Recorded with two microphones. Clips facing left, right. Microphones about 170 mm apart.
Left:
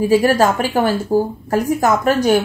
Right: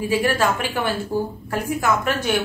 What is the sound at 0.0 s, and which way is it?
A woman's voice, 40° left (ahead or behind).